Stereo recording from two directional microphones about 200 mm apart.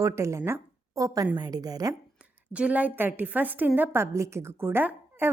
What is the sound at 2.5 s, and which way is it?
A woman's voice, 5° right (ahead or behind).